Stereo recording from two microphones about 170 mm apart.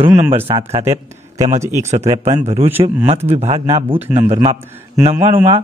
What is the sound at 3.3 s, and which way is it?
Speech, 40° right (ahead or behind).